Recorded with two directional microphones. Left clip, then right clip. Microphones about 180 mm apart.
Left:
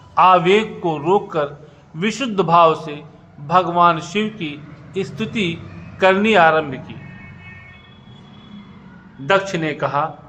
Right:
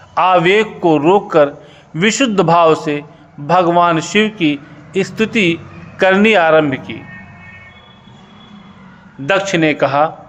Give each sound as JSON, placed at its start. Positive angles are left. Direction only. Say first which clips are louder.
{"t": 0.1, "sound": "a man's voice", "louder": "right 1 dB", "side_deg": -30}
{"t": 9.2, "sound": "a man's voice", "louder": "right 4 dB", "side_deg": -35}